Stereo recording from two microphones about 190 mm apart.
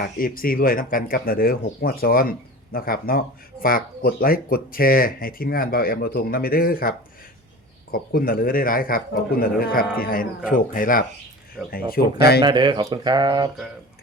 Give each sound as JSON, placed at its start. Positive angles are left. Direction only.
{"t": 0.0, "sound": "speech", "side_deg": 50}
{"t": 12.4, "sound": "speech", "side_deg": -25}